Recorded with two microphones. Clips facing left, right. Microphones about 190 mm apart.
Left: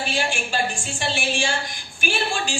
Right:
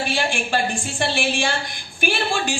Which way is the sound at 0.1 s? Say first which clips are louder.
Right 3 dB; 55° right (ahead or behind).